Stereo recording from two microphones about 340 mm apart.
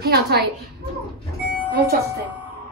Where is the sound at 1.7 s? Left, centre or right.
Right.